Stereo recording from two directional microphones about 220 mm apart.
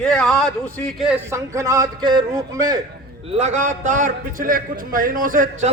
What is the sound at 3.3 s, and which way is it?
A man's voice, 30° right (ahead or behind).